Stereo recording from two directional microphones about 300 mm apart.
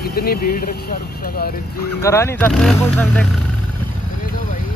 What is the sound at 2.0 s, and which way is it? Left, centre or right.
Speech, centre.